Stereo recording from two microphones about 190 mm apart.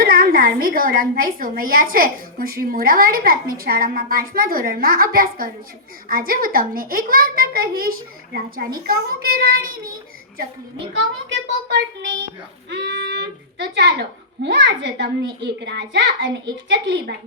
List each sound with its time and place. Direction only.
0.0 s a woman's voice: 50° right (ahead or behind)
11.3 s a child's voice: 75° right (ahead or behind)